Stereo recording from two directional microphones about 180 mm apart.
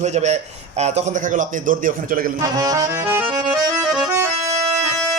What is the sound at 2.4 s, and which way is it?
Accordion, 20° right (ahead or behind).